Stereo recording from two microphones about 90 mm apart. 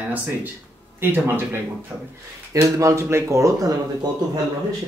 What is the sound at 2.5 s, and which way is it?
Speech, 35° right (ahead or behind).